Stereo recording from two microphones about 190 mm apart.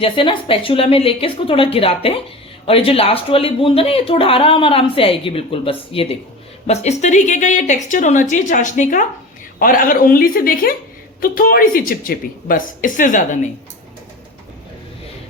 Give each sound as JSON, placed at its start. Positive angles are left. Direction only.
{"t": 0.0, "sound": "a woman's voice", "side_deg": 25}